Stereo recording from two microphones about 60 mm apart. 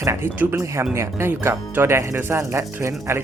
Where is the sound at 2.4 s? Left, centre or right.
Right.